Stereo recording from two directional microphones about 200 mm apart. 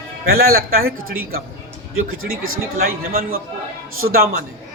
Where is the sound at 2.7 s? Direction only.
50° right (ahead or behind).